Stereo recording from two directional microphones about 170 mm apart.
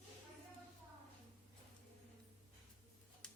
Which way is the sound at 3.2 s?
5° left (ahead or behind).